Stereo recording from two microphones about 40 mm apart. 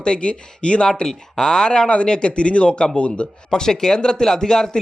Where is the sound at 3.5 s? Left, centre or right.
Centre.